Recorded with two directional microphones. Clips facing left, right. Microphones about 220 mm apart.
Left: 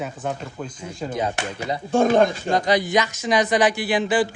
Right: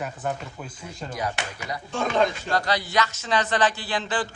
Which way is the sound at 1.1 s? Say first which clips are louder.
Left 4 dB; 25° left (ahead or behind).